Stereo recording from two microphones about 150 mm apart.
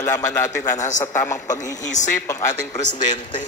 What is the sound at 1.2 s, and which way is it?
A man's voice, 20° left (ahead or behind).